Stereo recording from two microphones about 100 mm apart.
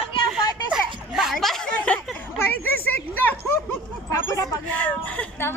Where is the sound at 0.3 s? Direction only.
5° right (ahead or behind).